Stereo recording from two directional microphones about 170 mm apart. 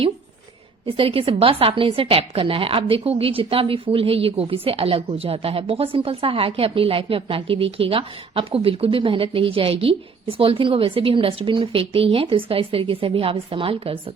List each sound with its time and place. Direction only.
0.9 s a woman's voice: 35° right (ahead or behind)